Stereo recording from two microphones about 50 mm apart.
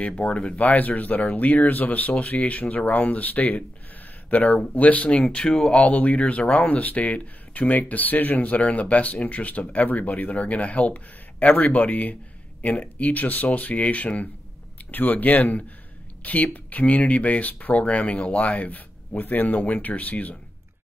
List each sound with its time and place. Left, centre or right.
0.0 s speech: left
5.2 s speech: centre; by 20.3 s left